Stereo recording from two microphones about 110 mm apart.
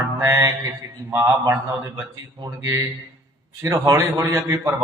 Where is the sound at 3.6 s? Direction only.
25° right (ahead or behind).